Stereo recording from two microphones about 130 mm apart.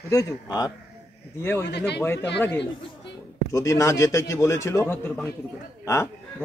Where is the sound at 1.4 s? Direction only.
15° left (ahead or behind).